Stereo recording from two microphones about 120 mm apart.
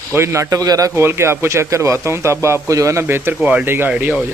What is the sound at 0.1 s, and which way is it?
A man's voice, 25° right (ahead or behind).